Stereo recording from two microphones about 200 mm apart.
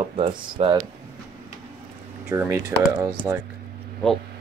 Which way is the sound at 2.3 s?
15° right (ahead or behind).